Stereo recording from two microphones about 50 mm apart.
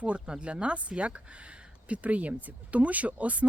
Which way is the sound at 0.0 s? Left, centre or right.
Right.